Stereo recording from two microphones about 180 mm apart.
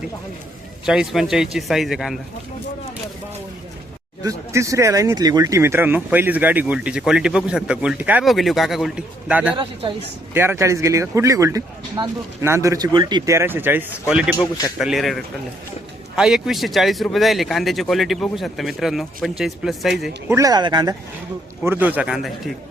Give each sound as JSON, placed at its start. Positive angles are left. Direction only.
{"t": 0.9, "sound": "speech", "side_deg": -5}
{"t": 4.2, "sound": "speech", "side_deg": -20}
{"t": 20.2, "sound": "speech", "side_deg": -15}
{"t": 21.6, "sound": "speech", "side_deg": -10}